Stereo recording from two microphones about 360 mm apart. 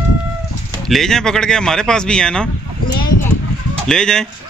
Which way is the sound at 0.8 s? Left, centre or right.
Centre.